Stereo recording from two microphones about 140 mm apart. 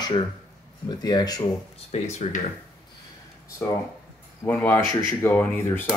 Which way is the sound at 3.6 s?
15° left (ahead or behind).